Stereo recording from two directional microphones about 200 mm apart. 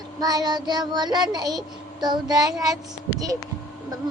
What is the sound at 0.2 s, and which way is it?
Child singing, 20° right (ahead or behind).